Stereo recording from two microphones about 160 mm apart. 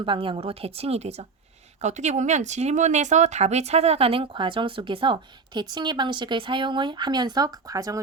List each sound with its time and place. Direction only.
0.0 s speech: 30° right (ahead or behind)